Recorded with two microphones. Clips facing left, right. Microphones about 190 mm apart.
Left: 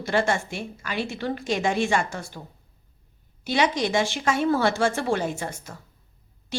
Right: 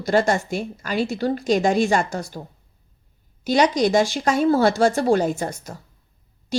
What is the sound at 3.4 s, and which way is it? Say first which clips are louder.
A woman's voice: right 5 dB; 40° right (ahead or behind).